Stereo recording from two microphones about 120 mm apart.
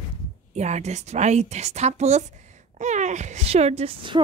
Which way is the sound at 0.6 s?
70° right (ahead or behind).